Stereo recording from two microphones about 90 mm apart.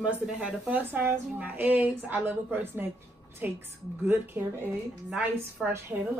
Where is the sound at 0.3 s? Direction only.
5° right (ahead or behind).